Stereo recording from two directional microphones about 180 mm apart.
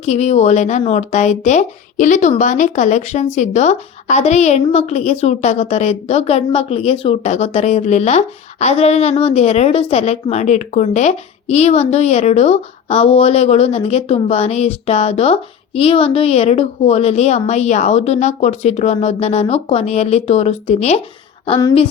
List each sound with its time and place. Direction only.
0.0 s a woman's voice: 40° left (ahead or behind)